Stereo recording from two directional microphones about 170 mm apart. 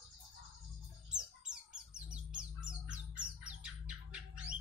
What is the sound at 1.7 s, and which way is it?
Bird, 5° right (ahead or behind).